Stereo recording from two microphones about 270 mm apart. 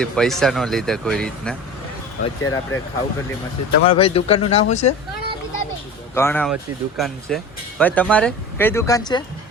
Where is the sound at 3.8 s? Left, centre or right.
Centre.